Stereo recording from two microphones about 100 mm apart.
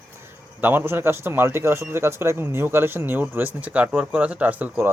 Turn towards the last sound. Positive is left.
turn(degrees=-15)  # may be behind; listen again after turning